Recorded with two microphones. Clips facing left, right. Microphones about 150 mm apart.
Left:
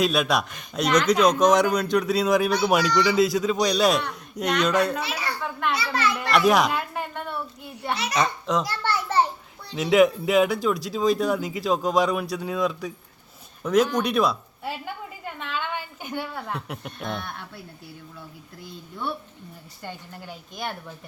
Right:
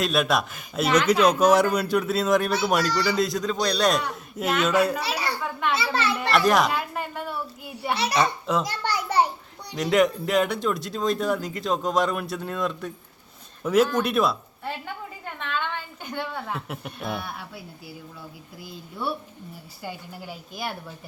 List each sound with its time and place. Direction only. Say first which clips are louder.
0.0 s speech: left 1 dB; centre (ahead or behind)
5.0 s a sound: right 2 dB; 35° right (ahead or behind)
5.4 s a sound: even; centre (ahead or behind)
5.7 s a child's voice: even; 25° right (ahead or behind)
6.3 s children playing: left 1 dB; centre (ahead or behind)
7.9 s a child's voice: right 3 dB; 30° right (ahead or behind)
8.2 s speech: left 2 dB; 5° right (ahead or behind)
8.6 s a sound: left 1 dB; 15° right (ahead or behind)
9.7 s a woman's voice: left 3 dB; centre (ahead or behind)
18.6 s a woman's voice: right 1 dB; 5° right (ahead or behind)